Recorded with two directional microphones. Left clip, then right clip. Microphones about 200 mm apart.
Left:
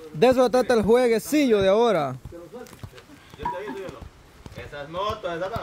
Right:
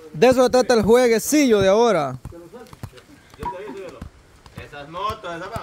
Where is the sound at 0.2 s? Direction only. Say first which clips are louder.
Right 3 dB; 15° right (ahead or behind).